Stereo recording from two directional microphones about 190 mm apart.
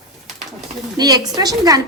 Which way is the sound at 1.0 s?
20° right (ahead or behind).